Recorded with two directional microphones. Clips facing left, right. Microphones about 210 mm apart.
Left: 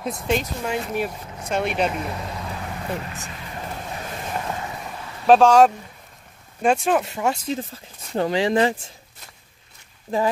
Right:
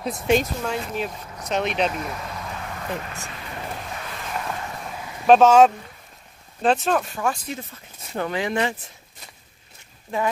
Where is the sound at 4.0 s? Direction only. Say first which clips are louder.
Left 4 dB; 25° left (ahead or behind).